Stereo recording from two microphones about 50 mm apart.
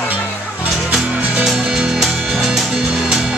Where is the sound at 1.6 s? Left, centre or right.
Centre.